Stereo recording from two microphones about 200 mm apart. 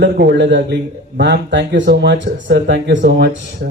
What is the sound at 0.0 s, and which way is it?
A man's voice, 60° right (ahead or behind).